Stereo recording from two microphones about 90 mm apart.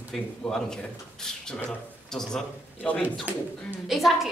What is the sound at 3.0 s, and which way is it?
Speech, 20° right (ahead or behind).